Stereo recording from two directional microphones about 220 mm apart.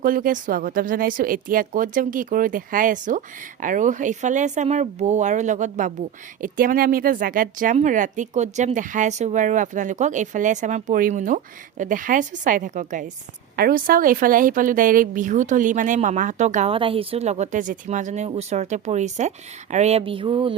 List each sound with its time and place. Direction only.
0.0 s speech: 40° right (ahead or behind); by 20.6 s 25° right (ahead or behind)